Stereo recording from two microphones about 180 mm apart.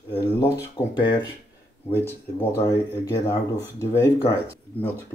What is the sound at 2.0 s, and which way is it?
Speech, 10° left (ahead or behind).